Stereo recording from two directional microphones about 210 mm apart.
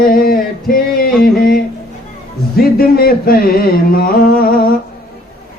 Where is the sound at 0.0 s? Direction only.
45° left (ahead or behind).